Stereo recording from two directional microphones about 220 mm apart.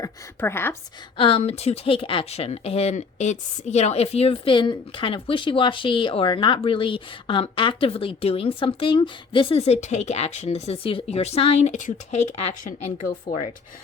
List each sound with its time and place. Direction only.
0.0 s speech: 10° left (ahead or behind)
1.1 s speech: 25° left (ahead or behind)